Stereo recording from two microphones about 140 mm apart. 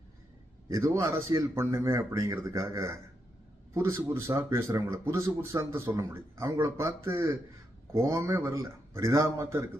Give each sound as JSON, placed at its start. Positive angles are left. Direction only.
{"t": 0.7, "sound": "speech", "side_deg": -20}